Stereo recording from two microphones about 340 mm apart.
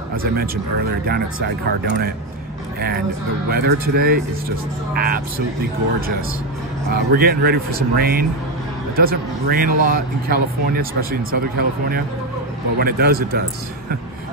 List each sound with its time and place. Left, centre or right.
0.1 s speech: right
3.4 s speech: right
6.9 s speech: right
12.7 s speech: right